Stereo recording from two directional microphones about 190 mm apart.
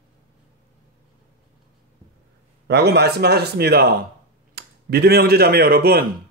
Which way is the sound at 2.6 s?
60° right (ahead or behind).